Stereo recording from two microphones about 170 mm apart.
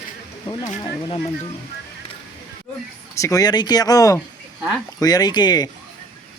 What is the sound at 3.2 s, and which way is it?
Speech, 20° left (ahead or behind).